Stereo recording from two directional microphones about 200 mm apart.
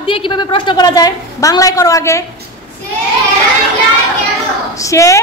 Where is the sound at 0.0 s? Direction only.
25° left (ahead or behind).